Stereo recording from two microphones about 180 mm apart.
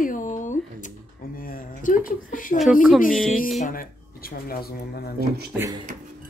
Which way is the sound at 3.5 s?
50° left (ahead or behind).